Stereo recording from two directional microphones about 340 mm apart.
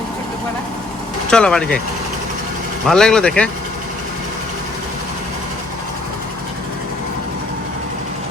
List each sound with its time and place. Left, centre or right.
1.3 s speech: centre
2.8 s speech: centre